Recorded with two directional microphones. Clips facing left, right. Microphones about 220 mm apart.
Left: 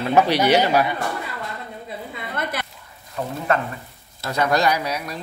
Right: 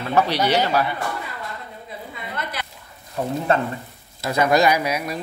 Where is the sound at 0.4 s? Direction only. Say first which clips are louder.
Left 3 dB; 15° left (ahead or behind).